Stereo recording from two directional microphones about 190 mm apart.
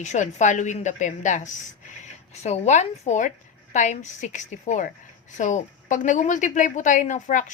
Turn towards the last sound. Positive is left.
turn(degrees=40)  # may be behind; listen again after turning